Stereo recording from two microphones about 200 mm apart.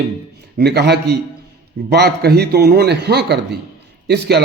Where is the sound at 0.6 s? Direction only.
55° right (ahead or behind).